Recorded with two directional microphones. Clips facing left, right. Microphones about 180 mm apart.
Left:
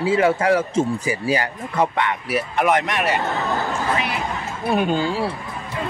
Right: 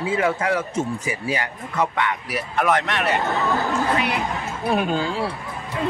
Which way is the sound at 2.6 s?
15° left (ahead or behind).